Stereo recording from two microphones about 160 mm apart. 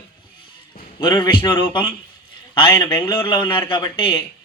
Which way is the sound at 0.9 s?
30° left (ahead or behind).